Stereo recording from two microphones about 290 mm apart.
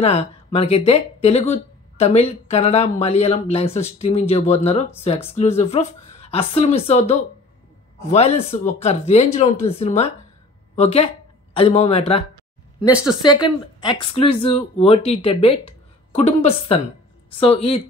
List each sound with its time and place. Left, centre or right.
0.0 s speech: left
13.7 s speech: centre